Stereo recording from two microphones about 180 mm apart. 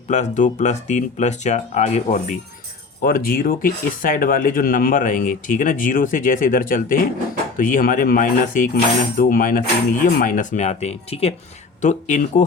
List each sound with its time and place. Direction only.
0.1 s speech: 40° left (ahead or behind)
3.0 s speech: 55° left (ahead or behind)